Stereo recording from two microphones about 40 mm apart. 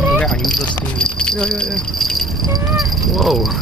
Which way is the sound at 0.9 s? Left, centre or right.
Left.